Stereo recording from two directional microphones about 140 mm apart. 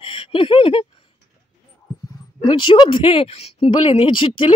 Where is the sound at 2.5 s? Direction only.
35° left (ahead or behind).